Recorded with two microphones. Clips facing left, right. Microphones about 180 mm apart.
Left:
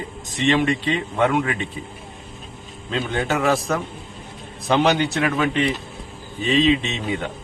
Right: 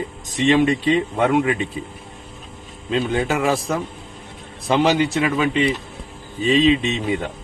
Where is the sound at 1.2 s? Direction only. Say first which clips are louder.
Left 1 dB; 20° right (ahead or behind).